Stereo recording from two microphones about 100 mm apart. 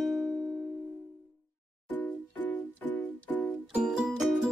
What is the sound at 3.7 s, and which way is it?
Music, 10° right (ahead or behind).